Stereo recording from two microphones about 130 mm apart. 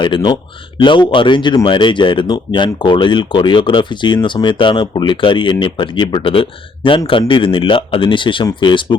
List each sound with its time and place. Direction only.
0.0 s speech: 35° left (ahead or behind)